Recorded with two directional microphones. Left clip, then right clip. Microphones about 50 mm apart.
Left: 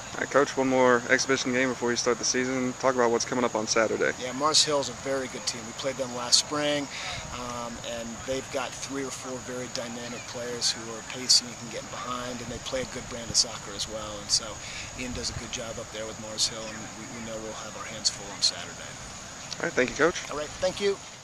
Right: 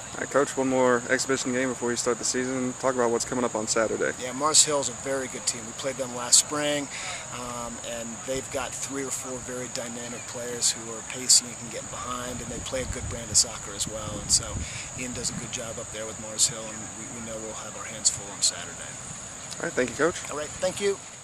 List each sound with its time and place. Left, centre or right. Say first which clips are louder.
0.2 s speech: left 1 dB; centre
1.1 s speech: left 2 dB; centre
1.5 s speech: left 1 dB; centre
2.2 s speech: left 1 dB; centre
4.2 s speech: right 2 dB; centre
18.0 s speech: left 1 dB; centre
19.6 s speech: left 1 dB; centre